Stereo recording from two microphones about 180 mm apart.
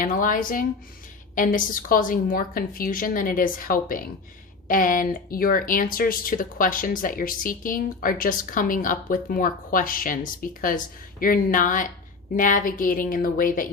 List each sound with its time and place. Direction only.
0.0 s speech: 50° left (ahead or behind)